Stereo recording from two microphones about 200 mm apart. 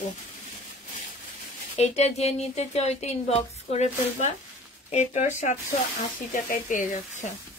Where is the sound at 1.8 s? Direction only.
30° left (ahead or behind).